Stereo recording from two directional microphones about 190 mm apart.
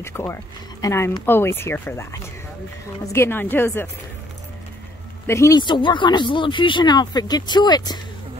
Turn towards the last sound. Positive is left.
turn(degrees=20)  # may be behind; listen again after turning